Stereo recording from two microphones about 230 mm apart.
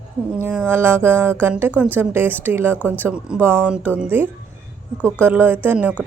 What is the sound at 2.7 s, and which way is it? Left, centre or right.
Speech, centre.